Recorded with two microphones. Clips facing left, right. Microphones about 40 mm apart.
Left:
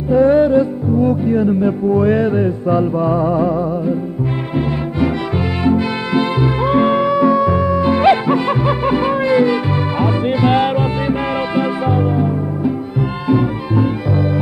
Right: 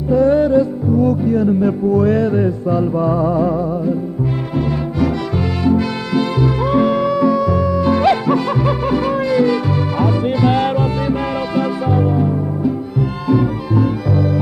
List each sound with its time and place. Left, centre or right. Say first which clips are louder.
0.1 s music: left 1 dB; left
5.6 s music: even; left